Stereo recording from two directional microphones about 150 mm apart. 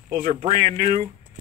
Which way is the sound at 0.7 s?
60° right (ahead or behind).